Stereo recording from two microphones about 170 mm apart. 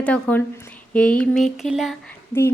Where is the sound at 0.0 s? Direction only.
10° left (ahead or behind).